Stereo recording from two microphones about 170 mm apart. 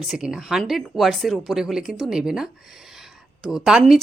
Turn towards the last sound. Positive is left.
turn(degrees=-5)  # may be behind; listen again after turning